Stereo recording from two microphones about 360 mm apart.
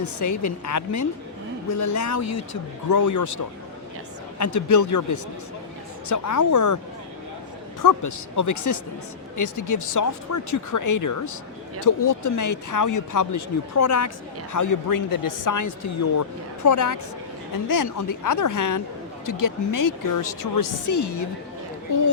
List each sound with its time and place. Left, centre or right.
0.0 s speech: left
7.8 s speech: left